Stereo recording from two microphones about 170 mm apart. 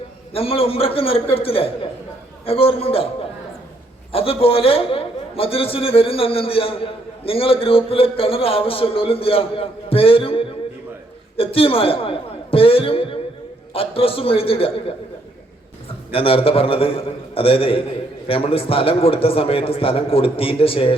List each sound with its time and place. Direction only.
0.3 s a man's voice: 35° left (ahead or behind)
4.1 s a man's voice: 35° left (ahead or behind)
16.1 s a man's voice: 35° left (ahead or behind)